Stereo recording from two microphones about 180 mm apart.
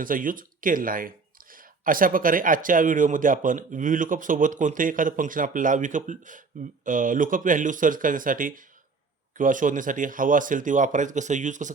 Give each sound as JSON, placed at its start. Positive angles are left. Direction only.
{"t": 0.0, "sound": "speech", "side_deg": -50}